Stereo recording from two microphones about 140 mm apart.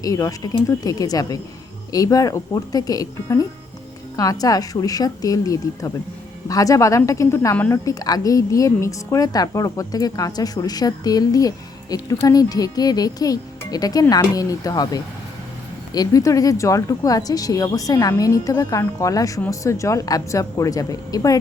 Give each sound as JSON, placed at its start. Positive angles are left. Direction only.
{"t": 0.0, "sound": "a woman's voice", "side_deg": 25}